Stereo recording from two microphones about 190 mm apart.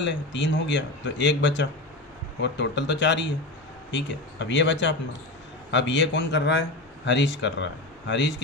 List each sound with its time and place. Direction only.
0.0 s speech: 70° left (ahead or behind)